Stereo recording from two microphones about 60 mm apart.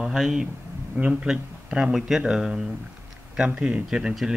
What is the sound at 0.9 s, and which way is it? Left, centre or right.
Speech, centre.